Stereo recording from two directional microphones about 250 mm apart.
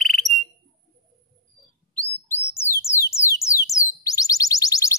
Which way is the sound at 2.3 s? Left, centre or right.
Centre.